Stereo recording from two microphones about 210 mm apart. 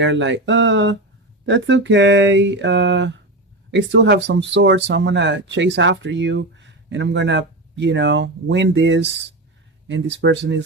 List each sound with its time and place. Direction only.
0.0 s speech: 60° right (ahead or behind)